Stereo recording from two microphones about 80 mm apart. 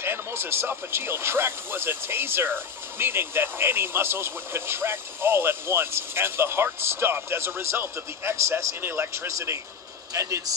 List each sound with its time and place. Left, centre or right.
0.0 s speech: right